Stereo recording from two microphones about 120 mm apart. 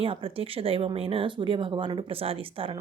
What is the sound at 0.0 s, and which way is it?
Speech, 50° right (ahead or behind).